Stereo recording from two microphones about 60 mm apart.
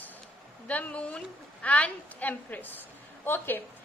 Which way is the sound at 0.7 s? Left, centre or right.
Left.